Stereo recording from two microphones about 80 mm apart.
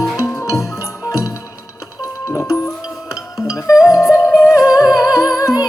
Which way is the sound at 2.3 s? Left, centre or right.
Left.